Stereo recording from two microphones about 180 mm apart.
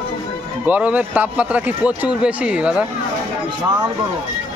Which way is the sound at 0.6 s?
10° right (ahead or behind).